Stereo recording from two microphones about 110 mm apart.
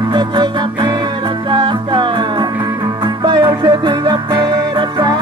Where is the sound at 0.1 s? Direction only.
45° right (ahead or behind).